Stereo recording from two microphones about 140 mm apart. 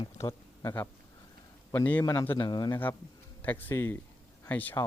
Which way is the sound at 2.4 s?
30° left (ahead or behind).